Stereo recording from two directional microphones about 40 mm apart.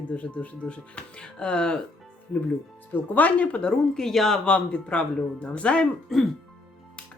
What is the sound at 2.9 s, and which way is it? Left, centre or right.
Speech, left.